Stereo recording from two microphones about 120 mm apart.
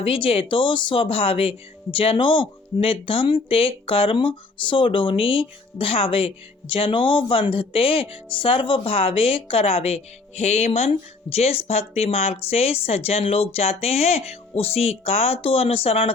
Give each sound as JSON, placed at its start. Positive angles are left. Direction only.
{"t": 0.0, "sound": "speech", "side_deg": 50}